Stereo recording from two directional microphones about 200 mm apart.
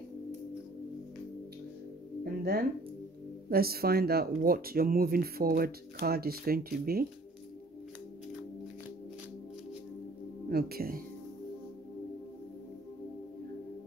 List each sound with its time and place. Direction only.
2.2 s speech: 50° right (ahead or behind)
10.5 s speech: 50° right (ahead or behind)